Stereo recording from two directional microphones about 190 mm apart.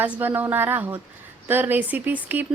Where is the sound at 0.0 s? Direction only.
10° right (ahead or behind).